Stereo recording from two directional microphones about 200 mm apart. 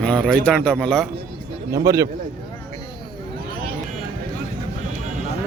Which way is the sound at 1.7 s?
15° right (ahead or behind).